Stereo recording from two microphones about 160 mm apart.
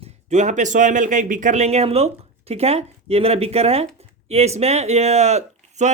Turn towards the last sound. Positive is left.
turn(degrees=-45)  # may be behind; listen again after turning